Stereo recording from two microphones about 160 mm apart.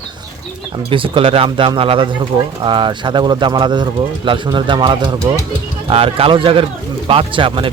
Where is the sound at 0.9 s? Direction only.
35° right (ahead or behind).